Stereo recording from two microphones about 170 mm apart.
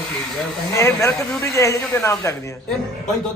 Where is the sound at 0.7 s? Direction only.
15° left (ahead or behind).